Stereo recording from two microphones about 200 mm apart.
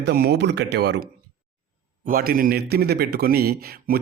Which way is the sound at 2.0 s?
45° right (ahead or behind).